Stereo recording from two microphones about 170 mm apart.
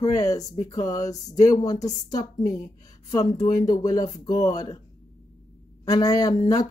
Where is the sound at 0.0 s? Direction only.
20° left (ahead or behind).